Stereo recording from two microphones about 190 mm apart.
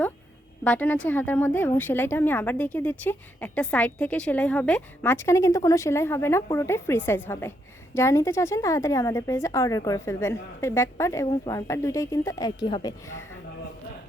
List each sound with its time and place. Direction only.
0.6 s speech: 10° left (ahead or behind)